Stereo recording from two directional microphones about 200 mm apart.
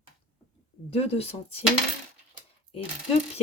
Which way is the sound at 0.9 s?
30° left (ahead or behind).